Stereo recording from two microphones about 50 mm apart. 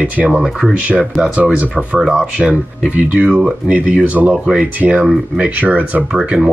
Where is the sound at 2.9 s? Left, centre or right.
Right.